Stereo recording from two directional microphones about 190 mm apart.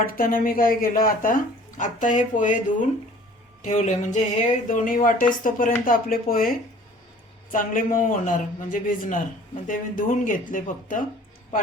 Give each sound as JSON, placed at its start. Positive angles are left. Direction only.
{"t": 0.0, "sound": "speech", "side_deg": 50}